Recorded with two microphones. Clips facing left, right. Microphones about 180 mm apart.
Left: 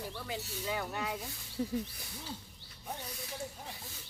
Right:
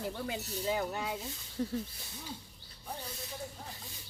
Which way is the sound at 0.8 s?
25° right (ahead or behind).